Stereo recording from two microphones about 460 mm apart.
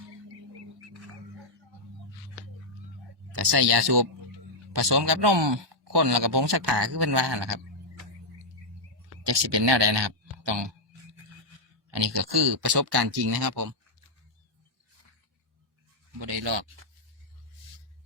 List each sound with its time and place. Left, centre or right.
3.3 s speech: right
9.2 s speech: right
11.9 s speech: right
16.2 s speech: right